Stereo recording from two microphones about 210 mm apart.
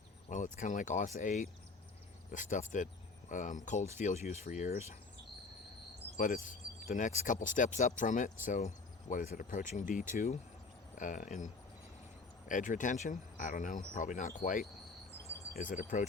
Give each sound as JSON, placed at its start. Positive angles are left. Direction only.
{"t": 0.3, "sound": "speech", "side_deg": 35}
{"t": 6.1, "sound": "speech", "side_deg": 40}